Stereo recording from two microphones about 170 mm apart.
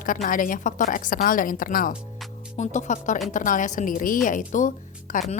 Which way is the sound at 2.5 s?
40° left (ahead or behind).